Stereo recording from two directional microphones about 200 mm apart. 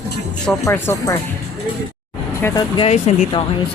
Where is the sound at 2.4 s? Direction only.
10° left (ahead or behind).